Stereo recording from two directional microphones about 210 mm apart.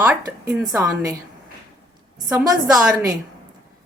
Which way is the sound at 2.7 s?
5° right (ahead or behind).